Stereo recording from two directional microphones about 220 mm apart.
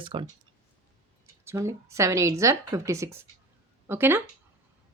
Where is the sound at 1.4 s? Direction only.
15° right (ahead or behind).